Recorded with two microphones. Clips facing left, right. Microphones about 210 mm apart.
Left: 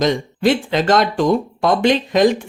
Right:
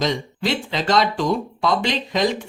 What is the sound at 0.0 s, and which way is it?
Speech, 50° left (ahead or behind).